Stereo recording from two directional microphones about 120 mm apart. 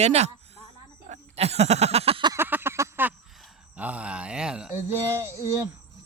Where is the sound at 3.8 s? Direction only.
10° right (ahead or behind).